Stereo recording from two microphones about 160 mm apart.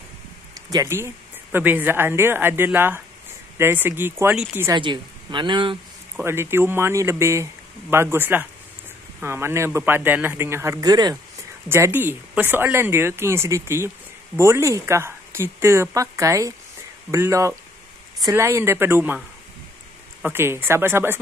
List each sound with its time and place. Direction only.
0.6 s speech: 25° right (ahead or behind)
4.7 s speech: 30° right (ahead or behind)
6.2 s speech: 15° right (ahead or behind)
11.7 s speech: 15° right (ahead or behind)